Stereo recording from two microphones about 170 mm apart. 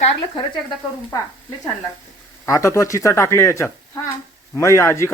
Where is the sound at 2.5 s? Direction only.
15° left (ahead or behind).